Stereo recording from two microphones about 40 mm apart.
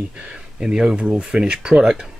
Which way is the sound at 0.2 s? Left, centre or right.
Right.